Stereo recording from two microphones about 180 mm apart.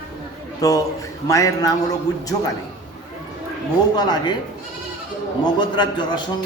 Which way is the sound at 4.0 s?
25° left (ahead or behind).